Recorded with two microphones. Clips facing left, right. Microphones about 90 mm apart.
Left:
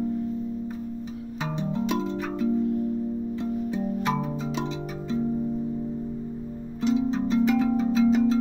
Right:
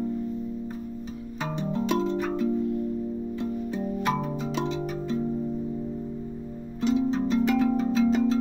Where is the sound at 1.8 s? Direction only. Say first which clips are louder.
Right 2 dB; 10° left (ahead or behind).